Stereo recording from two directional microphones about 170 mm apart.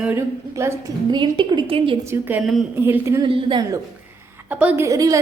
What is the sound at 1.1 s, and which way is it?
Speech, 25° right (ahead or behind).